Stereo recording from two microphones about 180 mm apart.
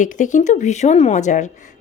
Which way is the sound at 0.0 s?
45° left (ahead or behind).